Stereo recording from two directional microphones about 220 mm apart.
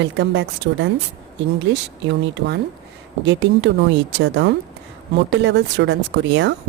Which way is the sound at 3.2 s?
55° right (ahead or behind).